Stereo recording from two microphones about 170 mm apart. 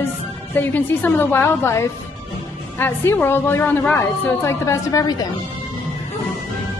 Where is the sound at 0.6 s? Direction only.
10° left (ahead or behind).